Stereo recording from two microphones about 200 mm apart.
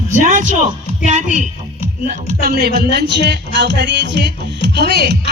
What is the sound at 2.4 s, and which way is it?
Speech, 50° right (ahead or behind).